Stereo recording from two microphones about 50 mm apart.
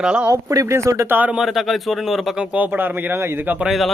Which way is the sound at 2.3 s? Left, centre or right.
Centre.